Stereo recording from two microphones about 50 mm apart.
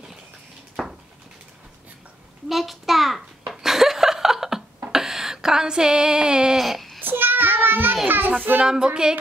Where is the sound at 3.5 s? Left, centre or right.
Centre.